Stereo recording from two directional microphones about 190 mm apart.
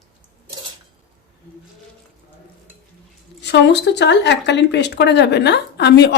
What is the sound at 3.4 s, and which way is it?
Speech, 65° left (ahead or behind).